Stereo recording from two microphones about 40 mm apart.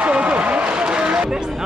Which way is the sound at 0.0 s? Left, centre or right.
Right.